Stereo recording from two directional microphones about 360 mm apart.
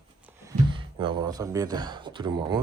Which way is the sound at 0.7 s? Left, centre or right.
Centre.